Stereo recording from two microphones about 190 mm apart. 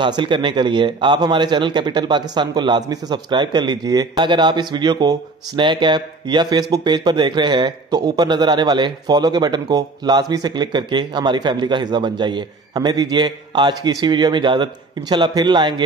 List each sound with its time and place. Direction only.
0.0 s speech: 25° right (ahead or behind)